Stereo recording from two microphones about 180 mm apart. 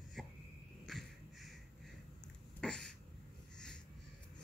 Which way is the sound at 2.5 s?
5° left (ahead or behind).